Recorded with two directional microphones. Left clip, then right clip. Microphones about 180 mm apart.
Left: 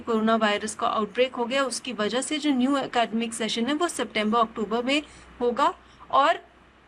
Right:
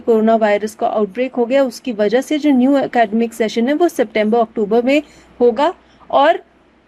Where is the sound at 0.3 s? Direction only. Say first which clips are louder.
Right 10 dB; 50° right (ahead or behind).